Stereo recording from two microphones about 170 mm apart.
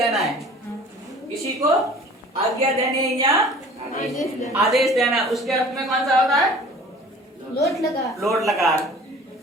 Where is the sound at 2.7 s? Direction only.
20° right (ahead or behind).